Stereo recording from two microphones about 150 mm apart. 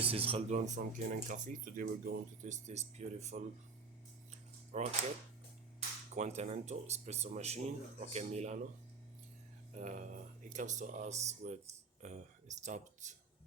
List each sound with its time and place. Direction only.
0.0 s speech: 40° right (ahead or behind)
0.5 s speech: 55° right (ahead or behind)
4.3 s a sound: 50° right (ahead or behind)
6.1 s speech: 50° right (ahead or behind)
9.7 s speech: 60° right (ahead or behind)